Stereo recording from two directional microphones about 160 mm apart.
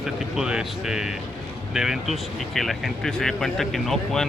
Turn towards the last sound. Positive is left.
turn(degrees=0)  # may be behind; listen again after turning